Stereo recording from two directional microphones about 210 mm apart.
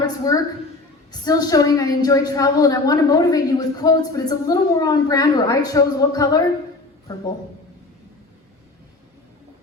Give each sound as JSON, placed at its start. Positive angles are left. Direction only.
{"t": 0.0, "sound": "a woman's voice", "side_deg": 15}